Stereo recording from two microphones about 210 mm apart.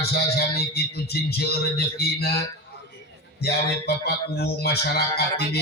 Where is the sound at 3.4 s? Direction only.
50° left (ahead or behind).